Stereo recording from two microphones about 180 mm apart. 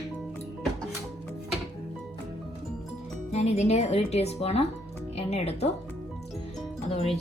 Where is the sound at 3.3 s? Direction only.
40° left (ahead or behind).